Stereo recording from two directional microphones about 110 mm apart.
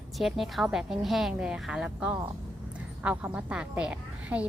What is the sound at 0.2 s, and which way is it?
A woman's voice, centre (ahead or behind).